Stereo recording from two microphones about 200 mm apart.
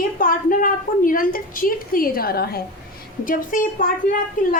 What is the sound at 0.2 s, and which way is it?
A woman's voice, 45° left (ahead or behind).